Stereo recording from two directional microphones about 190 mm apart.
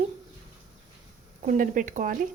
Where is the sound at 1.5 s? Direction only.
45° right (ahead or behind).